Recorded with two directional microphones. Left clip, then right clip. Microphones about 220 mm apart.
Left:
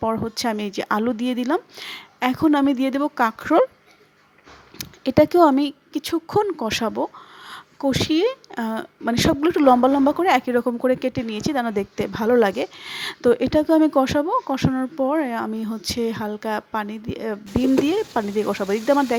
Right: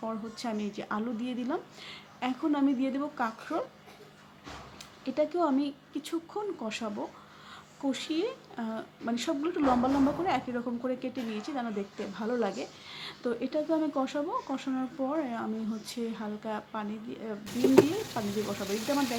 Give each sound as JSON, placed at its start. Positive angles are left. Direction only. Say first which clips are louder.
{"t": 0.0, "sound": "speech", "louder": "left 13 dB", "side_deg": 45}
{"t": 4.8, "sound": "speech", "louder": "left 13 dB", "side_deg": 45}